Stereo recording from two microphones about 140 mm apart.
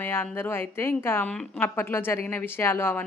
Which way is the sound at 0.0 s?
15° left (ahead or behind).